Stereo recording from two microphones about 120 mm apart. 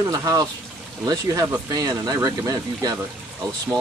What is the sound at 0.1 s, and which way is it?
Speech, 30° right (ahead or behind).